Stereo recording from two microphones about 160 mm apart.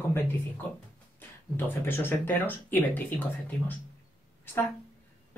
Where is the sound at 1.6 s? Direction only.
15° left (ahead or behind).